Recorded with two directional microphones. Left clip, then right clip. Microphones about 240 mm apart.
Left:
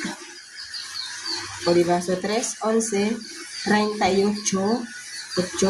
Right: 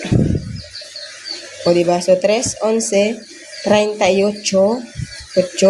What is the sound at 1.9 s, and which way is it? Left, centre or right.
Speech, right.